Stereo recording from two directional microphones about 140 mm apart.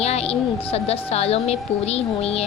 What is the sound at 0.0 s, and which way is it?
A woman's voice, 50° left (ahead or behind).